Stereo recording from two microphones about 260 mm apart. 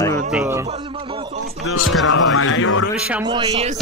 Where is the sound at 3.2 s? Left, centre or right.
Centre.